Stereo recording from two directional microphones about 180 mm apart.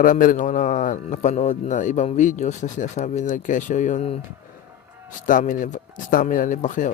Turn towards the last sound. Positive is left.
turn(degrees=45)  # may be behind; listen again after turning